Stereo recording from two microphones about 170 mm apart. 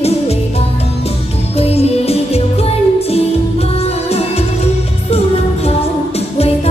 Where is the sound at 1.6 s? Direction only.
35° left (ahead or behind).